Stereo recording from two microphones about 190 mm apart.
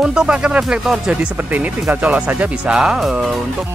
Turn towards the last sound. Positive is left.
turn(degrees=0)  # may be behind; listen again after turning